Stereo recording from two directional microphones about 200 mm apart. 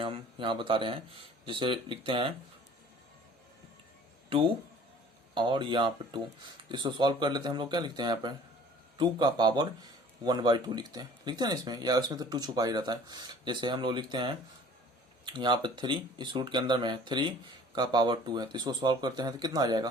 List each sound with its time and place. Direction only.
0.0 s speech: 25° right (ahead or behind)
5.3 s speech: 25° right (ahead or behind)